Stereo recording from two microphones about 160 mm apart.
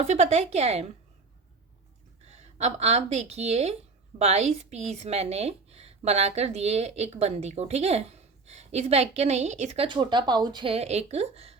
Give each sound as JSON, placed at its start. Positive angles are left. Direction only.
{"t": 0.0, "sound": "a woman's voice", "side_deg": -45}
{"t": 2.2, "sound": "a woman's voice", "side_deg": -45}